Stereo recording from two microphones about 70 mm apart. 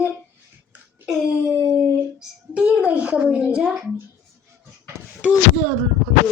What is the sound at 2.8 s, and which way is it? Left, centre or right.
Speech, centre.